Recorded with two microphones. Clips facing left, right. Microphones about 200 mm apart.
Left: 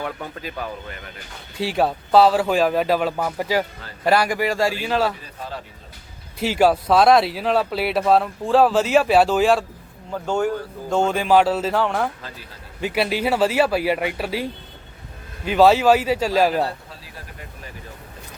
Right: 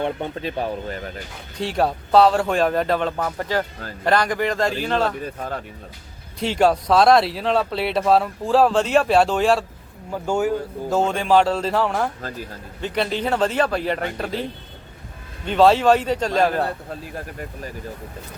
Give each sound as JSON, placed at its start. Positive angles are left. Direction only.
{"t": 0.0, "sound": "speech", "side_deg": -25}
{"t": 1.5, "sound": "speech", "side_deg": 0}
{"t": 5.2, "sound": "speech", "side_deg": -55}
{"t": 6.4, "sound": "speech", "side_deg": 5}